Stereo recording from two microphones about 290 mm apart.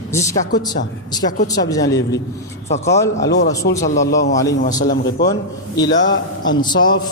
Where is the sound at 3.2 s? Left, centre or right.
Left.